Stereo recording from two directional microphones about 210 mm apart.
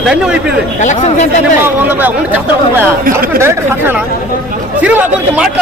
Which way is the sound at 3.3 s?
10° right (ahead or behind).